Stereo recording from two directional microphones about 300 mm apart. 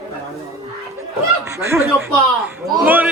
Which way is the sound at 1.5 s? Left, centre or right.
Centre.